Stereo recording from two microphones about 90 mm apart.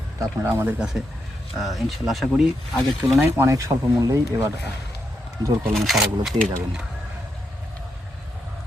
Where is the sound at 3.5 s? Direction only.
35° right (ahead or behind).